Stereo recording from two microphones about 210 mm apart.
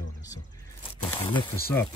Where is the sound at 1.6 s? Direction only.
10° left (ahead or behind).